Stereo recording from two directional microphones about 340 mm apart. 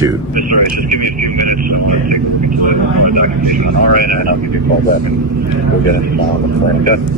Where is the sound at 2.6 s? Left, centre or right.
Right.